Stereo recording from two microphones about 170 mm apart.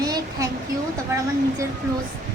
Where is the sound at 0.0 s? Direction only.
20° right (ahead or behind).